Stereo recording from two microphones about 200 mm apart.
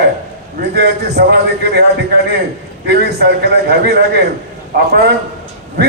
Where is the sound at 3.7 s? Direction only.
55° right (ahead or behind).